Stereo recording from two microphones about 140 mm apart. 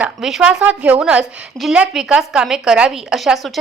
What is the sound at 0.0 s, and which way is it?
A woman's voice, 5° right (ahead or behind).